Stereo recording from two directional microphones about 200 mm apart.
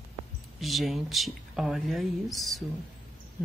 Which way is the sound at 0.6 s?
Centre (ahead or behind).